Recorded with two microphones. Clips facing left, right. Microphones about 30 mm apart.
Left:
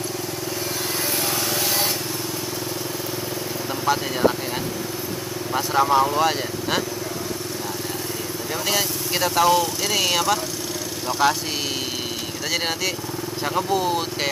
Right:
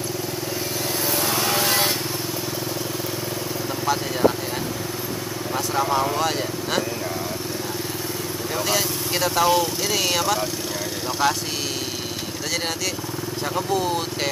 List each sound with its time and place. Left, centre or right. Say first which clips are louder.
1.5 s vehicle: right 3 dB; right
3.8 s speech: even; centre
5.5 s speech: left 4 dB; centre
8.6 s speech: left 1 dB; centre
13.6 s speech: left 1 dB; centre